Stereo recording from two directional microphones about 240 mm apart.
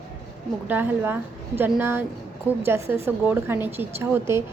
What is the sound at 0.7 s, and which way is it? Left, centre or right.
A woman's voice, centre.